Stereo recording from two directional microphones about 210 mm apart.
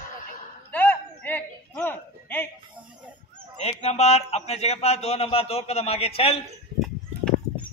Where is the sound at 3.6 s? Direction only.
30° left (ahead or behind).